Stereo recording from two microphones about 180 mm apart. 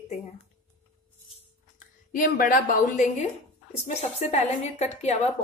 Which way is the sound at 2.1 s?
50° left (ahead or behind).